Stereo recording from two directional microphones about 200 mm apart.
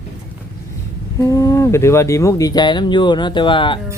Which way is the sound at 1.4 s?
15° left (ahead or behind).